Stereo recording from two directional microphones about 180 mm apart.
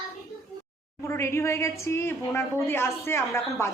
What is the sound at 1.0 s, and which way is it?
A woman's voice, 15° left (ahead or behind).